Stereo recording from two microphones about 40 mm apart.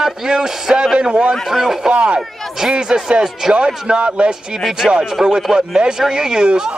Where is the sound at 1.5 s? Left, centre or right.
Centre.